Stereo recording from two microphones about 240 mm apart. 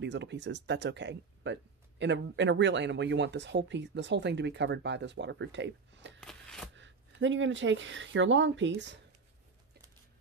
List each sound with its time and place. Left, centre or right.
0.0 s speech: right
6.2 s a sound: centre
6.8 s speech: right